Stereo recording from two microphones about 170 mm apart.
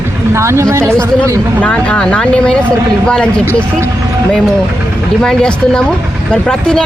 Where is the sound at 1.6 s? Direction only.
5° left (ahead or behind).